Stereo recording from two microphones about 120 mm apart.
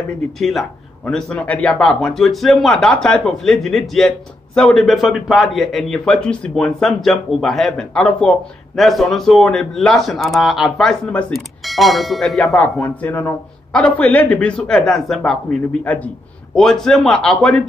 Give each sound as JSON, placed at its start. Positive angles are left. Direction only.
{"t": 0.4, "sound": "a man's voice", "side_deg": 0}
{"t": 1.0, "sound": "a man's voice", "side_deg": 10}
{"t": 12.8, "sound": "a man's voice", "side_deg": 15}
{"t": 15.8, "sound": "a man's voice", "side_deg": 15}